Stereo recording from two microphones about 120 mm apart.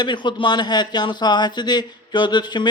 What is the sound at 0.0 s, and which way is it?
A man's voice, 40° left (ahead or behind).